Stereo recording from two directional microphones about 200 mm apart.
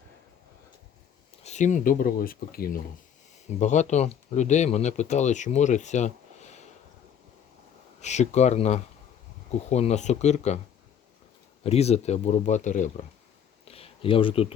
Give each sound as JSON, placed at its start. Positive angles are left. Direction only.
{"t": 1.5, "sound": "speech", "side_deg": 35}
{"t": 3.6, "sound": "speech", "side_deg": 35}
{"t": 8.0, "sound": "speech", "side_deg": 35}
{"t": 11.6, "sound": "speech", "side_deg": 30}
{"t": 13.7, "sound": "a sound", "side_deg": 30}